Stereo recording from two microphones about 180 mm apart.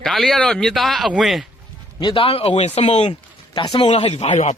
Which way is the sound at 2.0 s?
30° left (ahead or behind).